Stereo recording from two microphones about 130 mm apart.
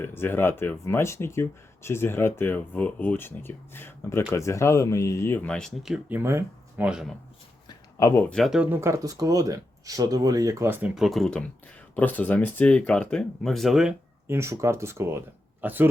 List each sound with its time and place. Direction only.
0.0 s speech: 15° left (ahead or behind); by 6.0 s centre (ahead or behind)
6.1 s speech: 20° right (ahead or behind)
6.8 s speech: 5° right (ahead or behind)
7.7 s a sound: 25° left (ahead or behind)
8.2 s speech: 5° left (ahead or behind)
8.5 s speech: 20° right (ahead or behind)
10.8 s speech: 5° right (ahead or behind)
14.3 s speech: 20° right (ahead or behind)